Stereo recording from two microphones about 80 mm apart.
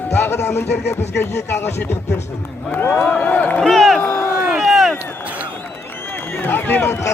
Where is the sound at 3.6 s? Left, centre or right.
Centre.